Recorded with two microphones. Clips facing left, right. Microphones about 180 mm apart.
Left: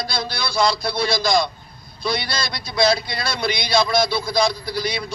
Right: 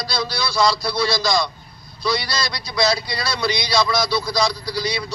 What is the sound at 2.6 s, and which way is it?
A man's voice, 50° left (ahead or behind).